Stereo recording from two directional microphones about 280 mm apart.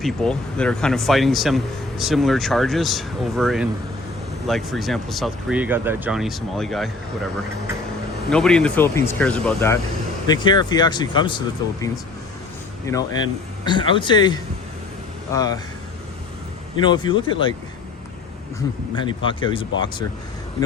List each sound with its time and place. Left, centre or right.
0.0 s a man's voice: centre
8.3 s a man's voice: centre
13.7 s speech: centre
16.8 s speech: centre
18.9 s speech: centre